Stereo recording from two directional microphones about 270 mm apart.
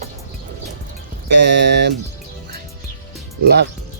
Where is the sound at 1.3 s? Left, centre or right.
Right.